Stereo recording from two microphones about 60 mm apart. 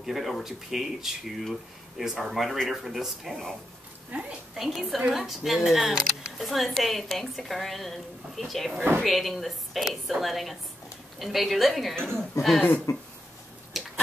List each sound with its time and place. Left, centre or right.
0.0 s speech: centre
4.6 s speech: centre
12.9 s speech: left
13.7 s a sound: centre